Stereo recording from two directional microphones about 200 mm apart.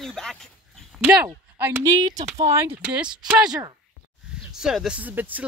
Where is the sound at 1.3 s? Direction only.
10° right (ahead or behind).